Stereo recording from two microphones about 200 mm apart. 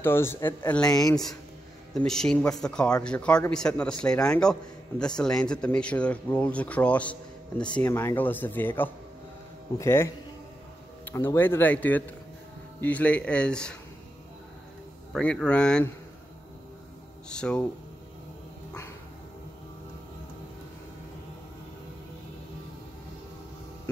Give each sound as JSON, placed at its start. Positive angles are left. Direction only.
{"t": 0.0, "sound": "speech", "side_deg": 10}
{"t": 2.0, "sound": "speech", "side_deg": 5}
{"t": 15.1, "sound": "speech", "side_deg": 5}
{"t": 17.3, "sound": "speech", "side_deg": 5}